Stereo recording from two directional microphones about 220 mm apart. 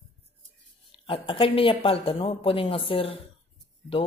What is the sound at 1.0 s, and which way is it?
A woman's voice, 25° left (ahead or behind).